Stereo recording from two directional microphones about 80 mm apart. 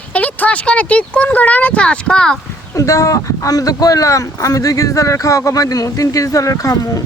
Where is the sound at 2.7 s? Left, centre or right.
Left.